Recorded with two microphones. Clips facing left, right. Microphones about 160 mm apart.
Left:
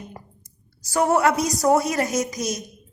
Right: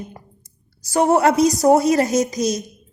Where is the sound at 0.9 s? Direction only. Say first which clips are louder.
Right 4 dB; 25° right (ahead or behind).